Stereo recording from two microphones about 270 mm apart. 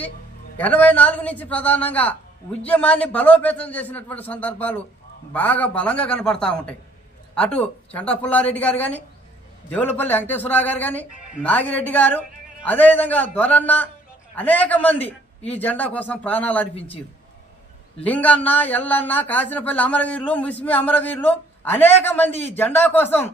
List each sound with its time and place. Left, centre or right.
0.6 s speech: centre
18.0 s speech: centre